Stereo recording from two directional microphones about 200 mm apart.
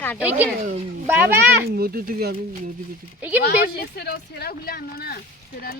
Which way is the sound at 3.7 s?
50° left (ahead or behind).